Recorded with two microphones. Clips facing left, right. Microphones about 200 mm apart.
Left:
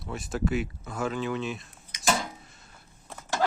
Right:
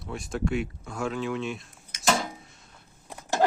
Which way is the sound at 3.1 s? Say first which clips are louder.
Right 3 dB; 15° right (ahead or behind).